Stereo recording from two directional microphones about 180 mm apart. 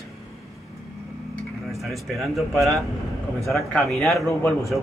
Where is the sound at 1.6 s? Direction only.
Centre (ahead or behind).